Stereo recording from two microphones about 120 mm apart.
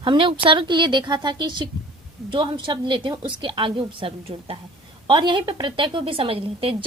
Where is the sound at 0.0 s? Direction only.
45° right (ahead or behind).